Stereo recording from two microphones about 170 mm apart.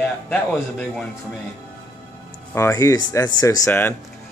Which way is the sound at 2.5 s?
15° left (ahead or behind).